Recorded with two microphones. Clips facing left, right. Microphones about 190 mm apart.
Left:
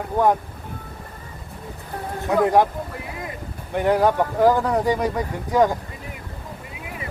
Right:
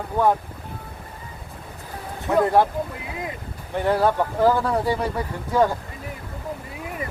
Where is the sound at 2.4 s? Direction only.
15° left (ahead or behind).